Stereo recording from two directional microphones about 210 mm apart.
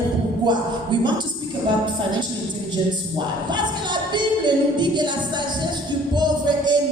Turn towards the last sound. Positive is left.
turn(degrees=-20)  # may be behind; listen again after turning